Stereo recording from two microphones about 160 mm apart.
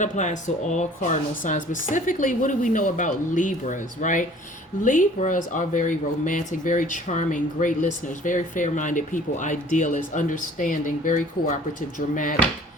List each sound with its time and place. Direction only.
0.0 s speech: 50° left (ahead or behind)